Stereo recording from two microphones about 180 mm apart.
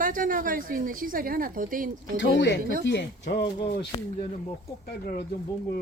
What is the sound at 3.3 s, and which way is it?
Speech, 65° left (ahead or behind).